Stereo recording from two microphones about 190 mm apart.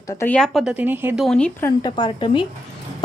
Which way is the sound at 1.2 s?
5° left (ahead or behind).